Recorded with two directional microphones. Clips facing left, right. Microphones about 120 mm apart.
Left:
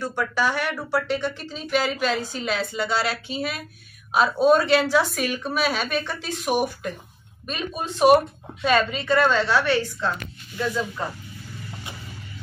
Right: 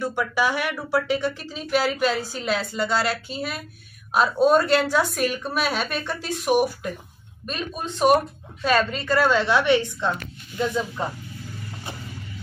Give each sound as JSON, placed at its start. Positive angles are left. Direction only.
{"t": 0.0, "sound": "a woman's voice", "side_deg": -10}